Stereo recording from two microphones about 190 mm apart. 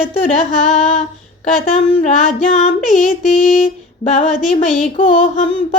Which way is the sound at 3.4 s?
45° left (ahead or behind).